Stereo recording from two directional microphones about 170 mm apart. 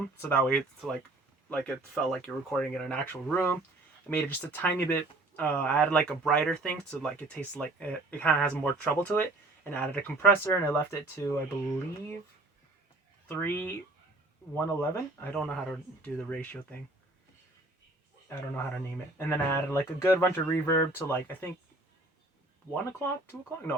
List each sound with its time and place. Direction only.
0.2 s speech: 10° left (ahead or behind)
13.2 s speech: 15° left (ahead or behind)
18.3 s speech: 10° left (ahead or behind)
22.7 s speech: 10° left (ahead or behind)